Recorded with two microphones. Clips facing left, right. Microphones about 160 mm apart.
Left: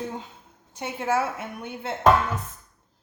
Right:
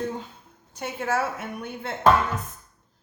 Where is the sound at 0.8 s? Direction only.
20° left (ahead or behind).